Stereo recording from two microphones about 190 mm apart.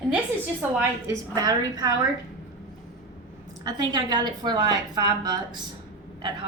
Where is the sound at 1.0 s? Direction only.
20° right (ahead or behind).